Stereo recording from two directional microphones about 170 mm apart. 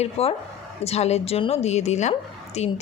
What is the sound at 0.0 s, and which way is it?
Speech, 35° left (ahead or behind).